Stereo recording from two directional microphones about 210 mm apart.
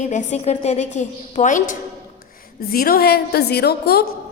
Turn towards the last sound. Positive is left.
turn(degrees=50)  # may be behind; listen again after turning